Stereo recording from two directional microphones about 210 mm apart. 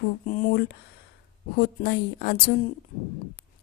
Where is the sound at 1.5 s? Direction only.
50° left (ahead or behind).